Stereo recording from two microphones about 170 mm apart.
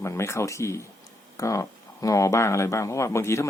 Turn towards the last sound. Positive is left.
turn(degrees=15)  # may be behind; listen again after turning